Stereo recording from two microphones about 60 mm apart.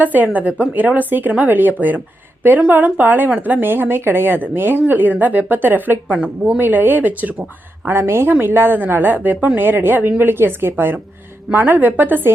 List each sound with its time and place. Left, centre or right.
0.0 s speech: right
6.1 s a woman's voice: centre
6.6 s speech: right
7.9 s speech: right